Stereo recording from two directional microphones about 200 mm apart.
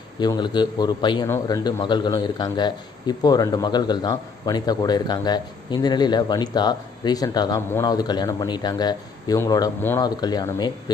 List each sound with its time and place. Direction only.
0.2 s a man's voice: 20° left (ahead or behind)